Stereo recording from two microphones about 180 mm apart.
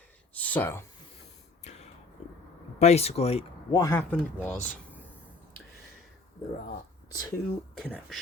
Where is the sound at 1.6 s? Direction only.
40° left (ahead or behind).